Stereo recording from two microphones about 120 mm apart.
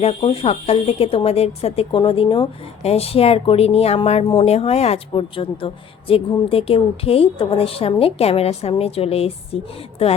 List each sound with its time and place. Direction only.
0.0 s speech: 60° left (ahead or behind); by 2.5 s 45° left (ahead or behind)
2.8 s a woman's voice: 60° left (ahead or behind)